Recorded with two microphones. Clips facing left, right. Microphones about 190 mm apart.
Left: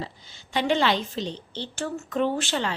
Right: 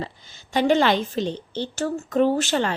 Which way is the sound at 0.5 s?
45° right (ahead or behind).